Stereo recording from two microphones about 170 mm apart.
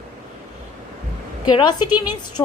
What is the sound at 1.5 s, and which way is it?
Speech, 25° left (ahead or behind).